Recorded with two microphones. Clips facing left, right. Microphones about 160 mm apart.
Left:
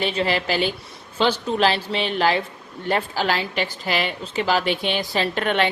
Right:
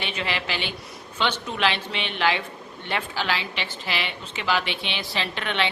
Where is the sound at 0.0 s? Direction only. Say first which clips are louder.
Left 7 dB; 35° left (ahead or behind).